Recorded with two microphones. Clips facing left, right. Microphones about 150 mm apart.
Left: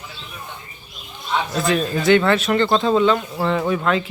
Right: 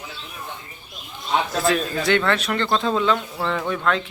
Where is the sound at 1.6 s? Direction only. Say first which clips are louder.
Left 2 dB; centre (ahead or behind).